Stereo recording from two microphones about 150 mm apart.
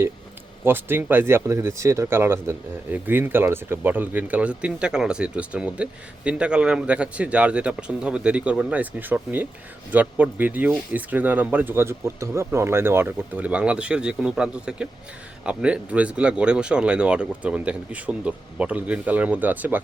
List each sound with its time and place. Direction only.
0.6 s speech: 15° right (ahead or behind)